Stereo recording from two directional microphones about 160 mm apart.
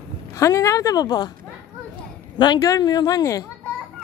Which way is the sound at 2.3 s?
30° left (ahead or behind).